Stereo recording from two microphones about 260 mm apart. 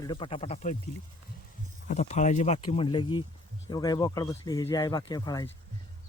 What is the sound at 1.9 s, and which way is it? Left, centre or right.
Speech, left.